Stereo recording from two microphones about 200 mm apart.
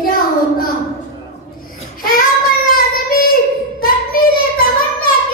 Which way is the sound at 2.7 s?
45° left (ahead or behind).